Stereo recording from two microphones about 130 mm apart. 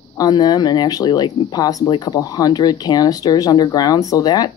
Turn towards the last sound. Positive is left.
turn(degrees=30)  # may be behind; listen again after turning